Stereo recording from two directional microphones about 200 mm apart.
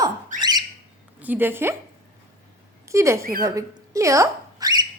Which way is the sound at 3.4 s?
15° right (ahead or behind).